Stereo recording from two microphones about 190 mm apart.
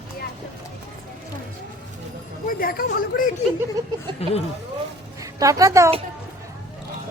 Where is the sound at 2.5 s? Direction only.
50° left (ahead or behind).